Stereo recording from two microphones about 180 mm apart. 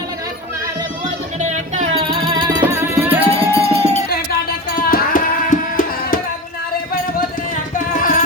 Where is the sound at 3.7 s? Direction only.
35° right (ahead or behind).